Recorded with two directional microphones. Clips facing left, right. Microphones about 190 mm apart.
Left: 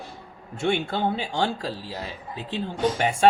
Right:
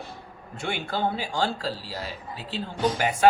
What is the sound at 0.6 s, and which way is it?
Speech, 25° left (ahead or behind).